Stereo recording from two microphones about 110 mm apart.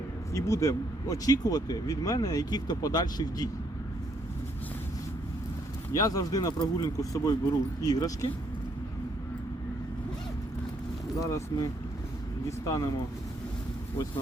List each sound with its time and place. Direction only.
0.3 s speech: 30° left (ahead or behind)
5.9 s speech: 35° left (ahead or behind)
11.2 s speech: 30° left (ahead or behind)